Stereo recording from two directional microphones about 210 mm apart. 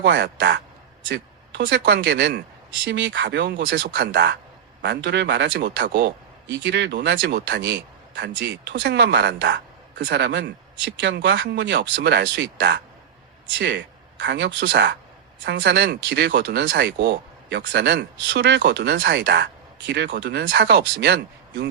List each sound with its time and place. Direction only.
0.0 s speech: 55° right (ahead or behind)